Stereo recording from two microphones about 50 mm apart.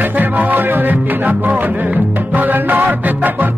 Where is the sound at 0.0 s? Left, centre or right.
Right.